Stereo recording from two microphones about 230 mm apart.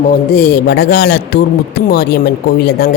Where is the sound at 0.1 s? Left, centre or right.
Left.